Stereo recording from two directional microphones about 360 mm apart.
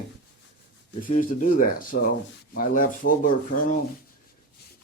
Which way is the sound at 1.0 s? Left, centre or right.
Left.